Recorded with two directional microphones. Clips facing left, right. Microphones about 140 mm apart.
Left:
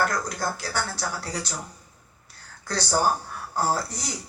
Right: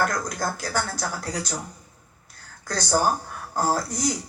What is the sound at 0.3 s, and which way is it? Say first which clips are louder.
Speech: right 2 dB; 45° right (ahead or behind).